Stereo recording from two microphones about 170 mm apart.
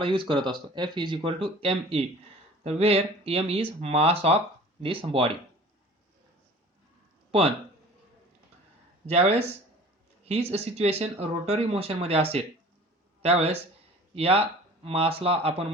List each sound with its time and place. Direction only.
0.0 s speech: 30° right (ahead or behind)
7.3 s a sound: 35° right (ahead or behind)
9.0 s speech: 35° right (ahead or behind)